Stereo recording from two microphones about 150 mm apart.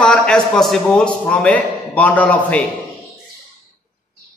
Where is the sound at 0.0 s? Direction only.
5° left (ahead or behind).